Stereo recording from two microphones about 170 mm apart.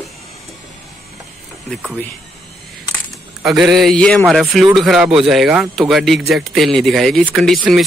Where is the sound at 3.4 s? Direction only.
Centre (ahead or behind).